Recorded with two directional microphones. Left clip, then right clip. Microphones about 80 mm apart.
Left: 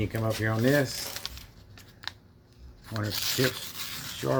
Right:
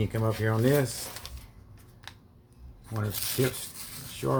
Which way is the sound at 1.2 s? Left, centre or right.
Centre.